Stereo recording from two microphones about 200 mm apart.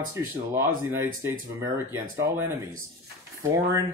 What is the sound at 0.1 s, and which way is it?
Speech, 15° right (ahead or behind).